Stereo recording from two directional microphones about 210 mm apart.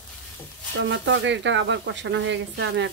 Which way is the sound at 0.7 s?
60° right (ahead or behind).